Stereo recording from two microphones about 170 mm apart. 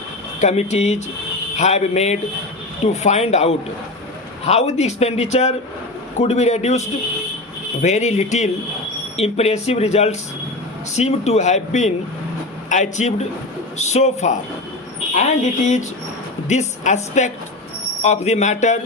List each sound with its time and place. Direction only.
0.3 s a man's voice: 40° left (ahead or behind)
16.5 s a man's voice: 45° left (ahead or behind)